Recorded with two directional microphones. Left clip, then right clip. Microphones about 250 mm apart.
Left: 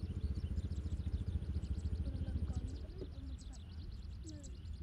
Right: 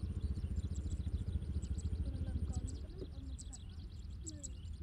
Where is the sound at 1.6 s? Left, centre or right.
Centre.